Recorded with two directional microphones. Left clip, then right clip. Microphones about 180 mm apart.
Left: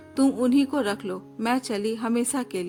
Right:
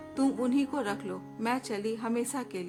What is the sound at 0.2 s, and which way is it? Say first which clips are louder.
Speech: left 7 dB; 40° left (ahead or behind).